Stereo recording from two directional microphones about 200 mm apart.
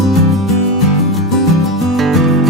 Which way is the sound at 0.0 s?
Centre (ahead or behind).